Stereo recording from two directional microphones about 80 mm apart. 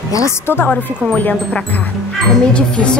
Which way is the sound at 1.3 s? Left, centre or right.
Centre.